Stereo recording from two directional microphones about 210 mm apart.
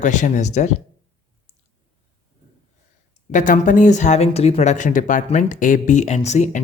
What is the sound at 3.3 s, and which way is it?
Speech, 35° left (ahead or behind).